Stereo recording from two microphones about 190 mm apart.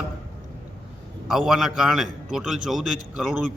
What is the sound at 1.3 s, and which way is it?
A man's voice, centre (ahead or behind).